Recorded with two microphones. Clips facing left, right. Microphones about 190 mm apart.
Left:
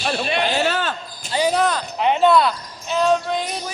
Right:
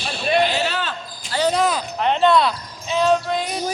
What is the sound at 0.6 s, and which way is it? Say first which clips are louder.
Speech: left 3 dB; 50° left (ahead or behind).